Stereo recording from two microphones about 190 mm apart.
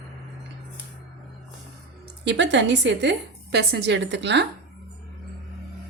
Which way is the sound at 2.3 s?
70° right (ahead or behind).